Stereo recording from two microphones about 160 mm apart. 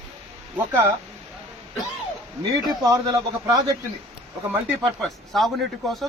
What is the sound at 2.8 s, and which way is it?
Speech, 20° right (ahead or behind).